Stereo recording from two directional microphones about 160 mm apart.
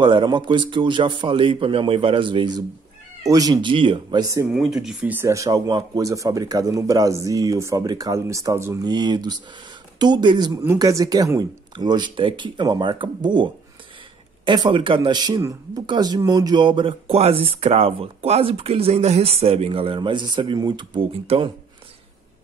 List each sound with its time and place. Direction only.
0.0 s speech: 30° right (ahead or behind)
4.6 s speech: centre (ahead or behind); by 21.5 s 30° right (ahead or behind)